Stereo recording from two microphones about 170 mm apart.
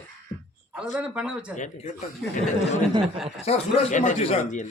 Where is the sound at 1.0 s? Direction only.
5° right (ahead or behind).